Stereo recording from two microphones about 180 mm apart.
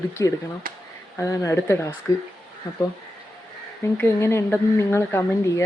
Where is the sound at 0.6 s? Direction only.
50° right (ahead or behind).